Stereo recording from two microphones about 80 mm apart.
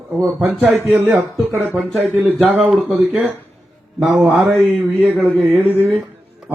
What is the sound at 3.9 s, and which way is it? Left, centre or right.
Speech, centre.